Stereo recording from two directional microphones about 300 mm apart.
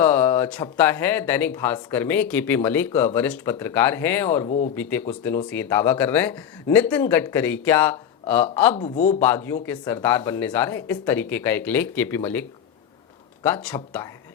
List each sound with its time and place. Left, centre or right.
0.0 s speech: centre
4.4 s speech: left
4.7 s speech: centre
8.7 s speech: left
9.2 s speech: centre